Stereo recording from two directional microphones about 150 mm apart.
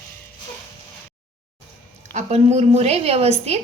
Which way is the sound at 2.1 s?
45° right (ahead or behind).